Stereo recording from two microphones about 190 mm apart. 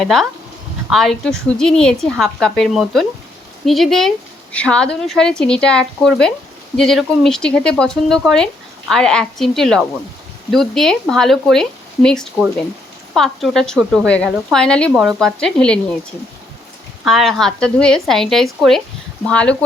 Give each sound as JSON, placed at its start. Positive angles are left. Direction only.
{"t": 0.0, "sound": "a woman's voice", "side_deg": 0}
{"t": 17.1, "sound": "a woman's voice", "side_deg": 0}